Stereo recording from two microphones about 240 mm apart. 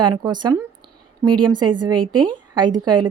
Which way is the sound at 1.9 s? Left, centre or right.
Right.